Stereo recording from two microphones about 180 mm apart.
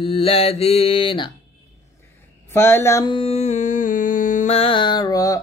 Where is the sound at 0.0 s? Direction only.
30° left (ahead or behind).